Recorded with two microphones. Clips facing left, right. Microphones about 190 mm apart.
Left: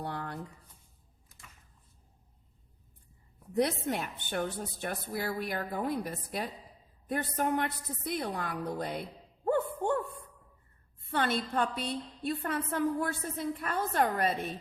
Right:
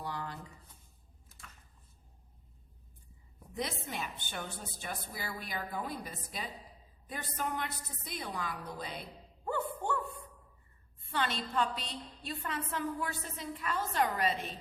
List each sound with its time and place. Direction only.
0.0 s a sound: 60° left (ahead or behind)
3.5 s a woman's voice: 60° left (ahead or behind)
11.1 s a woman's voice: 50° left (ahead or behind)